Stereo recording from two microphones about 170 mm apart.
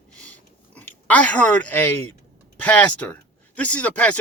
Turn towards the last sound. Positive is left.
turn(degrees=10)  # may be behind; listen again after turning